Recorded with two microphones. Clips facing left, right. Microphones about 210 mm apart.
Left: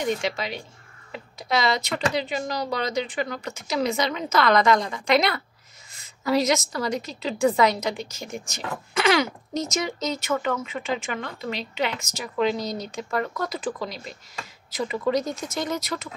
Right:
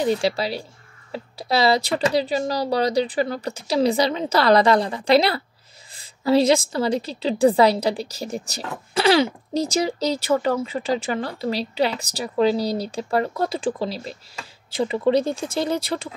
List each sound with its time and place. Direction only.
0.0 s a woman's voice: 35° right (ahead or behind)